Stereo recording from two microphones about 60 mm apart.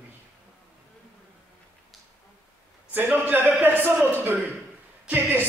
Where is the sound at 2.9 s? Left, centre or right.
Right.